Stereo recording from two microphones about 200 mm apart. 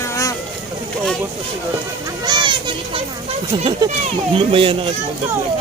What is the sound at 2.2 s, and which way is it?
Children playing, 20° right (ahead or behind).